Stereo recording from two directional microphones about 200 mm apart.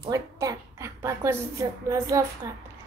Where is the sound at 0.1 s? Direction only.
15° right (ahead or behind).